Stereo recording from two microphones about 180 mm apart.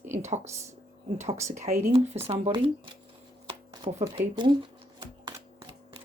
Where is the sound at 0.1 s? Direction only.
40° right (ahead or behind).